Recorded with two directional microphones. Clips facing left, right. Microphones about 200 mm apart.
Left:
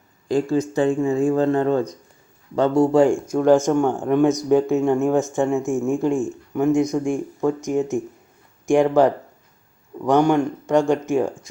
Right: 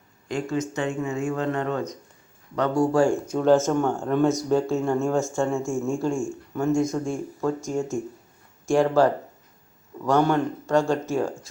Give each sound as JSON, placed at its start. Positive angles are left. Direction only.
{"t": 0.3, "sound": "speech", "side_deg": 35}
{"t": 10.0, "sound": "speech", "side_deg": 15}